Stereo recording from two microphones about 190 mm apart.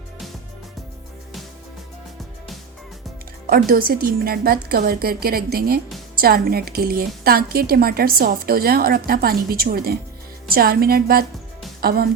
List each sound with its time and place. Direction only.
3.5 s a woman's voice: 50° right (ahead or behind)